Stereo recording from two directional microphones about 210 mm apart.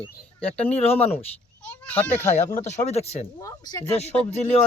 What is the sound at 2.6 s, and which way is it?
Speech, 30° left (ahead or behind).